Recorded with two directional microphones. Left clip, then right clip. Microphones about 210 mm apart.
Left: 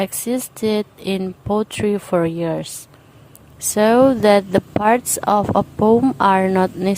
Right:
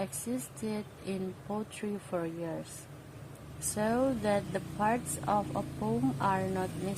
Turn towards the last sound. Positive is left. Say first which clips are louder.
# left 17 dB
turn(degrees=50)  # may be behind; listen again after turning